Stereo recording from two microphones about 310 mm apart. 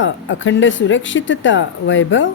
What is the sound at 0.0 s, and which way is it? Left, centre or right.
Speech, left.